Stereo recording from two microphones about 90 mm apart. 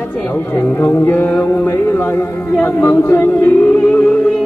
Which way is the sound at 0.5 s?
25° left (ahead or behind).